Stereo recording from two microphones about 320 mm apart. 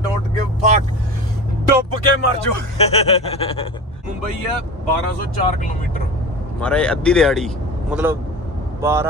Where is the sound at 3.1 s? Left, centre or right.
Centre.